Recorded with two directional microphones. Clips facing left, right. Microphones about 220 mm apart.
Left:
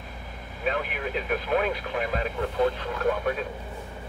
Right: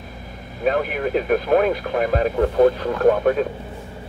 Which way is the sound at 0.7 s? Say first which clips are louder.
Right 8 dB; 45° right (ahead or behind).